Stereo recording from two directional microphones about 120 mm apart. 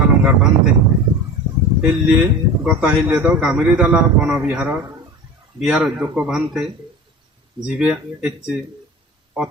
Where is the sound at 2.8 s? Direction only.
15° right (ahead or behind).